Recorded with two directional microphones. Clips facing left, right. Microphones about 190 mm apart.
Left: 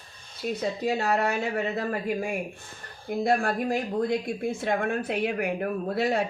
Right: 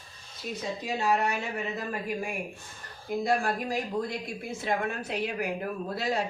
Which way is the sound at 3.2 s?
55° left (ahead or behind).